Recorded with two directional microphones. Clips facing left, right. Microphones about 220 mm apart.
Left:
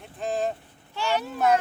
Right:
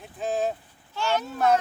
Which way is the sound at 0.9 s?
15° left (ahead or behind).